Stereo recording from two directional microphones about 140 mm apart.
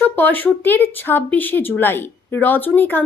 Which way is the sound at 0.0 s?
15° left (ahead or behind).